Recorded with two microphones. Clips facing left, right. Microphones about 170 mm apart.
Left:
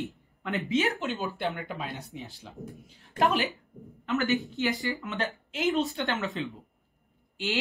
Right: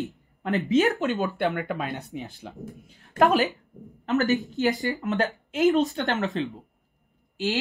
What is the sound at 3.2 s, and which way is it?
Speech, 40° right (ahead or behind).